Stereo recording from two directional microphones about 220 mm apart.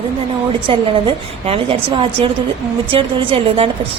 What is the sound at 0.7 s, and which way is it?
Speech, 25° right (ahead or behind).